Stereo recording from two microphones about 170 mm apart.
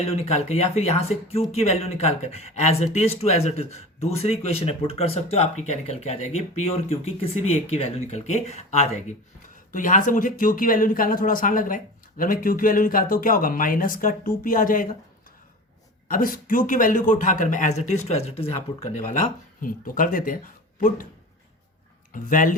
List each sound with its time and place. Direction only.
0.0 s speech: 35° left (ahead or behind); by 14.9 s 55° left (ahead or behind)
16.0 s speech: 55° left (ahead or behind)
22.1 s speech: 55° left (ahead or behind)